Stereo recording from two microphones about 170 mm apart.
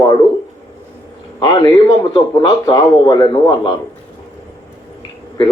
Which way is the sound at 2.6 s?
20° left (ahead or behind).